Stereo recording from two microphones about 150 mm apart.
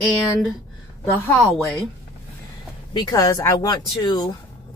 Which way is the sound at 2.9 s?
25° left (ahead or behind).